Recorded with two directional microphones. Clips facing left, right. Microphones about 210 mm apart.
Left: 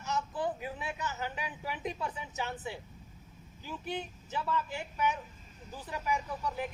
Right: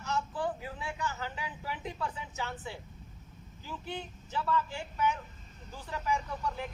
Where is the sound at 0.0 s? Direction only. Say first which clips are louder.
Even; 20° left (ahead or behind).